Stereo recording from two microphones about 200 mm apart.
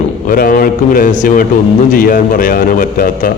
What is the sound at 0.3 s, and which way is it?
A man's voice, 45° left (ahead or behind).